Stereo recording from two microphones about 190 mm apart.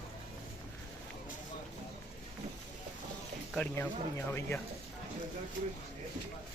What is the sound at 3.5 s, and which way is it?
A man's voice, 5° left (ahead or behind).